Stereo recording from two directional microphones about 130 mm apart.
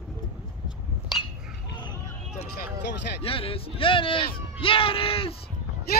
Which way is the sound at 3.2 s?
45° left (ahead or behind).